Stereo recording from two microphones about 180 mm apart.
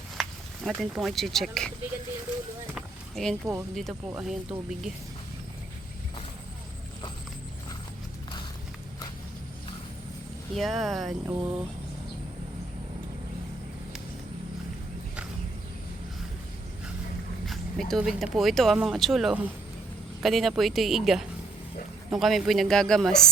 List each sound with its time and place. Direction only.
0.2 s speech: centre (ahead or behind)
2.7 s a sound: centre (ahead or behind)
3.4 s speech: 15° right (ahead or behind)
4.2 s a woman's voice: 5° right (ahead or behind)
10.5 s a woman's voice: centre (ahead or behind)
11.3 s speech: 20° right (ahead or behind)
17.4 s a woman's voice: centre (ahead or behind)